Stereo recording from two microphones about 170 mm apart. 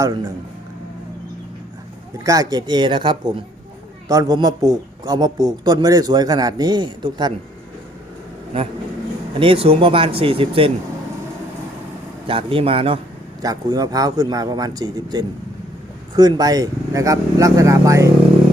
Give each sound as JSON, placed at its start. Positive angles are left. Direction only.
{"t": 0.0, "sound": "a man's voice", "side_deg": -25}
{"t": 2.1, "sound": "a man's voice", "side_deg": -20}
{"t": 9.4, "sound": "speech", "side_deg": -35}
{"t": 12.3, "sound": "speech", "side_deg": -30}
{"t": 13.4, "sound": "a man's voice", "side_deg": -20}